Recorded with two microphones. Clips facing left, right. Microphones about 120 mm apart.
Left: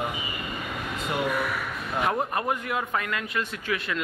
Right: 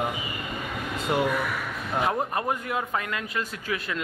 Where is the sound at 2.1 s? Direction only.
30° right (ahead or behind).